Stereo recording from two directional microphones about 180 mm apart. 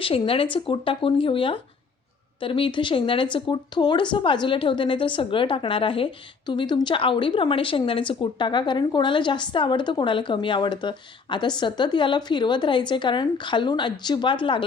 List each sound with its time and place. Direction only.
0.0 s speech: 30° left (ahead or behind)